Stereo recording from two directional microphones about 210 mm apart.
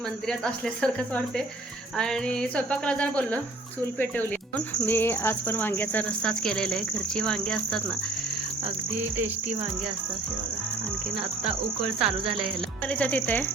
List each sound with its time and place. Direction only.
0.3 s a sound: 5° left (ahead or behind)
3.9 s speech: 10° left (ahead or behind)
12.0 s music: 25° right (ahead or behind)
12.9 s speech: 5° left (ahead or behind)